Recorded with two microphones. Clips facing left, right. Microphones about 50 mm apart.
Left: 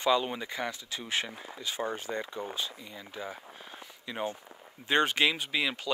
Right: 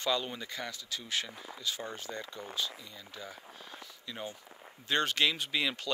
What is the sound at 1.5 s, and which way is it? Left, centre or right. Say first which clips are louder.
Speech: left 5 dB; left.